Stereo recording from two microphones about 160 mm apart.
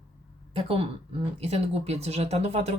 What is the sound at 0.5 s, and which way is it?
Speech, 35° right (ahead or behind).